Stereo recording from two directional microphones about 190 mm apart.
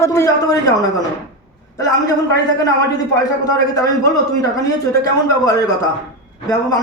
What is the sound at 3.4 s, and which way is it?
A man's voice, 20° left (ahead or behind).